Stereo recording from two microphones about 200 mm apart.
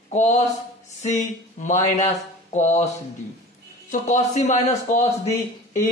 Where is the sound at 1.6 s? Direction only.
35° left (ahead or behind).